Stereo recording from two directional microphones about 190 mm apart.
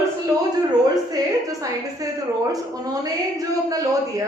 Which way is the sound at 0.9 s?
20° right (ahead or behind).